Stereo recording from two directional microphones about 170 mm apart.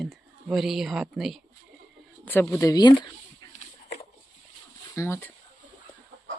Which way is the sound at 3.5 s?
40° left (ahead or behind).